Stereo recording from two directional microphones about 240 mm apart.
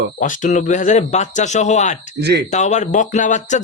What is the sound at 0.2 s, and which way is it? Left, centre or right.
Speech, left.